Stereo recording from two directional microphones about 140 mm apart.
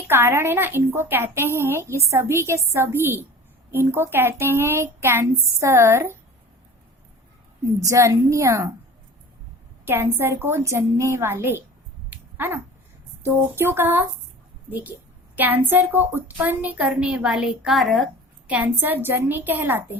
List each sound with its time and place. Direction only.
0.1 s a woman's voice: 15° right (ahead or behind)
7.8 s a woman's voice: 20° right (ahead or behind)
9.8 s a woman's voice: 15° right (ahead or behind)
12.1 s dog: 15° right (ahead or behind)
13.6 s a woman's voice: 15° right (ahead or behind); by 18.0 s centre (ahead or behind)
18.4 s a woman's voice: 10° right (ahead or behind)